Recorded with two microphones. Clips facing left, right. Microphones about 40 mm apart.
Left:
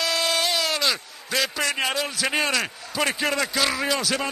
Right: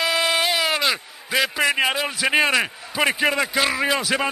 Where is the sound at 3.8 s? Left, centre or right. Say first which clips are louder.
Right 3 dB; centre.